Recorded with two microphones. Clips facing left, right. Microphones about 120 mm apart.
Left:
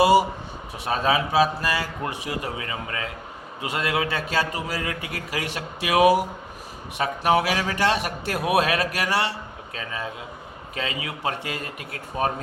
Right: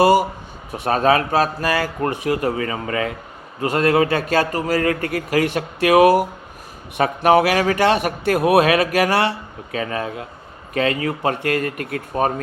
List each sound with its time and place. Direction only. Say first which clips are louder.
0.0 s a man's voice: right 3 dB; 50° right (ahead or behind)
3.6 s a man's voice: right 9 dB; 45° right (ahead or behind)